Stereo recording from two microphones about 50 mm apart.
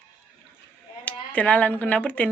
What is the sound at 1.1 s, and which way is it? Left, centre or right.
Speech, left.